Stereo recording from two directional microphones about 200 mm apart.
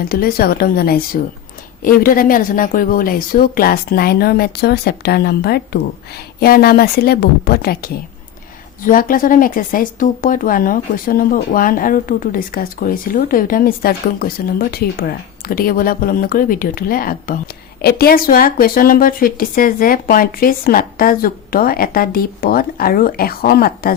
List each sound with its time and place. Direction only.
0.0 s speech: 50° left (ahead or behind)